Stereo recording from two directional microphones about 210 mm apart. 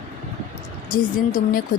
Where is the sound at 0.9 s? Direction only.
40° left (ahead or behind).